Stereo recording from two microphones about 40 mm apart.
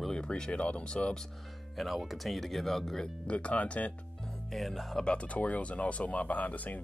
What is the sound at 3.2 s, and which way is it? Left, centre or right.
Speech, left.